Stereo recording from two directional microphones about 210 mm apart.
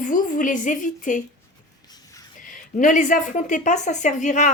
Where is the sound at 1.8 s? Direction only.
20° left (ahead or behind).